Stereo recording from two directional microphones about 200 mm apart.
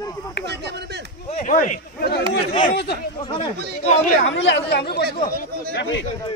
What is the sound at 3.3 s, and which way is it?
Speech, 30° left (ahead or behind).